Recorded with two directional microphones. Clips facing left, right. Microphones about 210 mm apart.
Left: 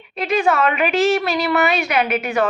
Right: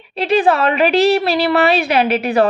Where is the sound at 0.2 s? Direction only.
30° right (ahead or behind).